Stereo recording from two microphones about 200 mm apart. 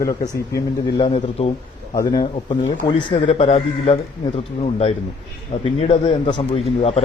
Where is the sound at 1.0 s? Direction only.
30° left (ahead or behind).